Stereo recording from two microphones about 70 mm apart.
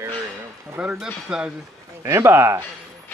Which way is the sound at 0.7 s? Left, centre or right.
Centre.